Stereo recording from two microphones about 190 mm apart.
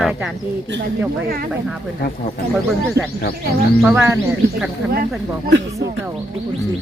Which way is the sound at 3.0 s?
15° right (ahead or behind).